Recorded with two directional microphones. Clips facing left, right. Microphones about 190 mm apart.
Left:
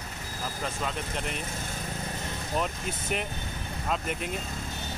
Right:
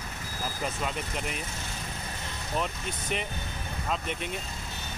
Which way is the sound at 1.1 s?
Centre (ahead or behind).